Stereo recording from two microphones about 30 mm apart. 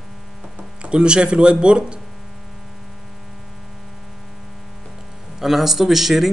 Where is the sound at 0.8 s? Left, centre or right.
Right.